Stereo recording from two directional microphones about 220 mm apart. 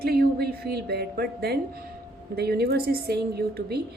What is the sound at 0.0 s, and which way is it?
A woman's voice, 45° right (ahead or behind).